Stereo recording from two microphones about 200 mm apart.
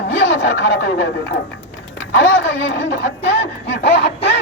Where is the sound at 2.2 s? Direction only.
60° left (ahead or behind).